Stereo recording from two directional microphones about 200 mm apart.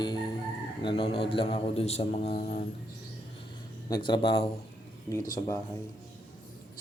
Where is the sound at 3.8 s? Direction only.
20° left (ahead or behind).